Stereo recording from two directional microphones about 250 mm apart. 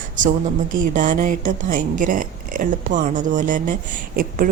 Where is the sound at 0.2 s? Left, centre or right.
Right.